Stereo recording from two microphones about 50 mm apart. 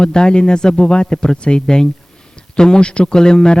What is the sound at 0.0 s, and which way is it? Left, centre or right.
A man's voice, centre.